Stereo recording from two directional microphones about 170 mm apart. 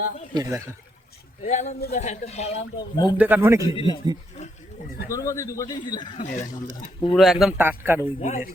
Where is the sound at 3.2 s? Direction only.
10° right (ahead or behind).